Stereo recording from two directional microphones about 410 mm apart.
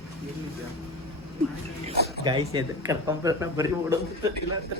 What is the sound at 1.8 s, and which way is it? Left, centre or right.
Speech, right.